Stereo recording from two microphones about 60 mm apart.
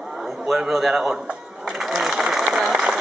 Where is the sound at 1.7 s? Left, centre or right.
Centre.